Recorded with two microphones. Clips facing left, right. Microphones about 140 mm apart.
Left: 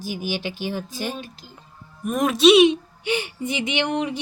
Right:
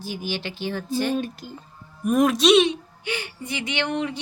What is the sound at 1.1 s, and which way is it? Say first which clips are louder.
Speech: right 8 dB; 55° right (ahead or behind).